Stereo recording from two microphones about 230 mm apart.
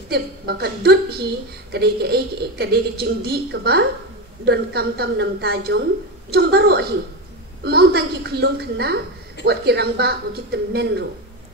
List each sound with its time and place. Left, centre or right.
0.1 s a woman's voice: right